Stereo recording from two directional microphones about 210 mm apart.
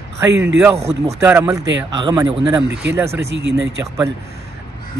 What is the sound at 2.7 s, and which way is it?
Speech, 55° right (ahead or behind).